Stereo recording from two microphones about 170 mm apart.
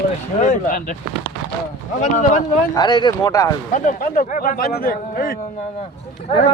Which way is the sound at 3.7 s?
50° left (ahead or behind).